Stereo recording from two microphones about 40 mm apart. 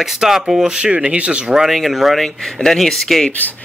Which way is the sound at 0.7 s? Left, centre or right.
Right.